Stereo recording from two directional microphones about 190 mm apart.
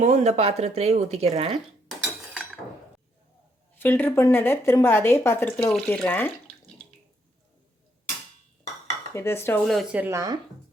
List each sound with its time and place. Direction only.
0.0 s speech: 40° right (ahead or behind)
3.8 s speech: 10° left (ahead or behind)
9.1 s speech: 15° left (ahead or behind)
9.6 s speech: 5° right (ahead or behind)